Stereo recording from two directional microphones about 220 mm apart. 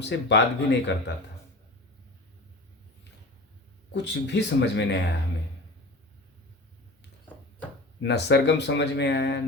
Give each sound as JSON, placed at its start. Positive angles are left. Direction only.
{"t": 0.0, "sound": "speech", "side_deg": 50}
{"t": 3.9, "sound": "speech", "side_deg": 50}
{"t": 7.3, "sound": "a sound", "side_deg": 5}
{"t": 8.0, "sound": "speech", "side_deg": 50}